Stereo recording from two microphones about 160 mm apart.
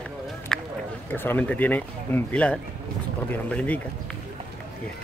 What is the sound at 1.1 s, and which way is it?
Speech, 10° left (ahead or behind).